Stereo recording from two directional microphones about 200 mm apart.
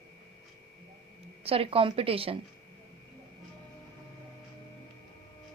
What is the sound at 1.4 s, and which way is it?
Speech, 30° right (ahead or behind).